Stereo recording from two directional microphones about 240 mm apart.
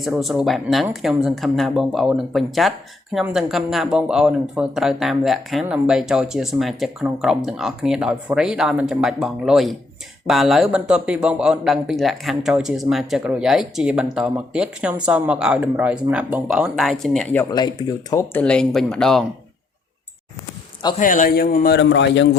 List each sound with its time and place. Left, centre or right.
0.0 s a woman's voice: centre
17.5 s a woman's voice: centre
21.0 s a man's voice: left